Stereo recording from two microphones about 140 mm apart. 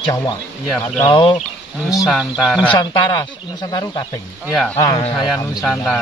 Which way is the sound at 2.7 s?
35° left (ahead or behind).